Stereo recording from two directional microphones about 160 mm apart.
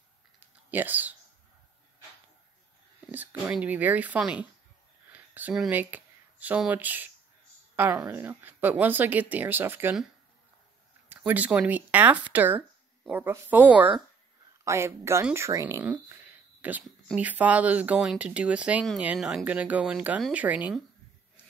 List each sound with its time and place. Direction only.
0.4 s a sound: 10° right (ahead or behind)
3.1 s speech: 10° right (ahead or behind)
11.1 s speech: 10° right (ahead or behind)